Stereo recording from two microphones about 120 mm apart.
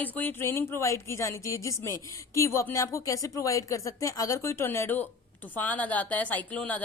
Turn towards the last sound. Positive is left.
turn(degrees=10)  # may be behind; listen again after turning